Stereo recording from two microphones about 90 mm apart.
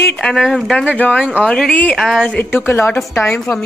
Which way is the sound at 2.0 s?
Centre (ahead or behind).